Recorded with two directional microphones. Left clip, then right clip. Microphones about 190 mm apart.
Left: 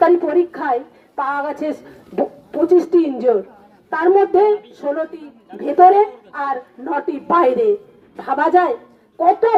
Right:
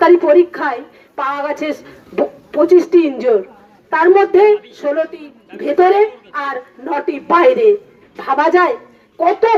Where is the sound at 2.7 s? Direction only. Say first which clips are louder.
Right 3 dB; 45° left (ahead or behind).